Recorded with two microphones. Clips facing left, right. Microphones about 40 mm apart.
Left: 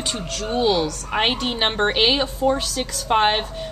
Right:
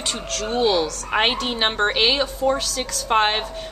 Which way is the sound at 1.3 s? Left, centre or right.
Centre.